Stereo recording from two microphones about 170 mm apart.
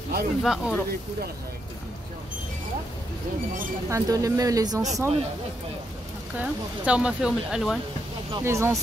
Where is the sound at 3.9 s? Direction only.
20° right (ahead or behind).